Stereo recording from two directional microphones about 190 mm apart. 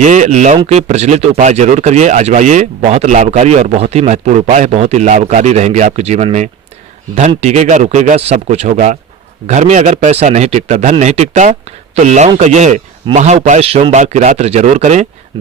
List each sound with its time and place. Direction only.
0.0 s speech: 40° right (ahead or behind)